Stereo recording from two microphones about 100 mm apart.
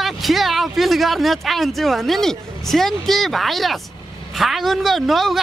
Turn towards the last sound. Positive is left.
turn(degrees=0)  # may be behind; listen again after turning